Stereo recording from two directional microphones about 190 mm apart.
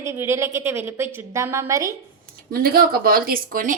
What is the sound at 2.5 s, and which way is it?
Speech, 50° right (ahead or behind).